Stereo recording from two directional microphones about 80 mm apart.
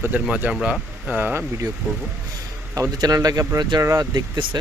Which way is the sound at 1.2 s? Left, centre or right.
Right.